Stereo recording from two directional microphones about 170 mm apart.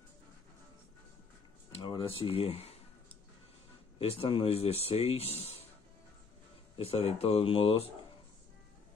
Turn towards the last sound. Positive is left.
turn(degrees=35)  # may be behind; listen again after turning